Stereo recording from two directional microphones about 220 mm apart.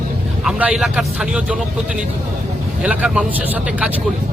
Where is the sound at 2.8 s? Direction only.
5° right (ahead or behind).